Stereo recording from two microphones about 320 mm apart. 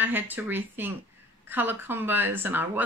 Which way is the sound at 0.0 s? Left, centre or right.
Centre.